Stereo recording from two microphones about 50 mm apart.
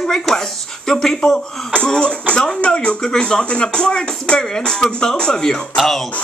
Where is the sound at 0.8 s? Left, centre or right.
Centre.